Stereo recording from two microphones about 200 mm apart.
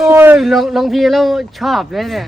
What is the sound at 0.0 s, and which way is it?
Speech, 10° right (ahead or behind).